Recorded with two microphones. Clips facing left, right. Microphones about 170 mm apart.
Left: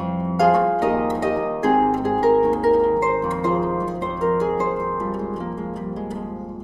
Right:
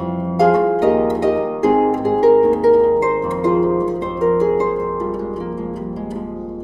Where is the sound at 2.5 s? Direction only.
15° right (ahead or behind).